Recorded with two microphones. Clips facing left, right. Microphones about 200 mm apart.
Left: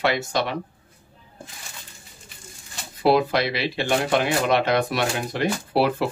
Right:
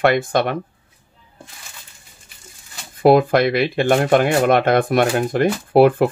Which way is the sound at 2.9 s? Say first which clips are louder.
Right 6 dB; 50° right (ahead or behind).